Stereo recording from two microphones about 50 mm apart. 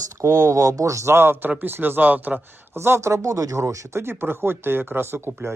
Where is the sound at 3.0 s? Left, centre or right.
Right.